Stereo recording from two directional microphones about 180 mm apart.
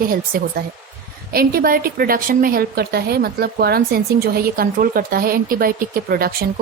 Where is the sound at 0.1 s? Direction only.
55° right (ahead or behind).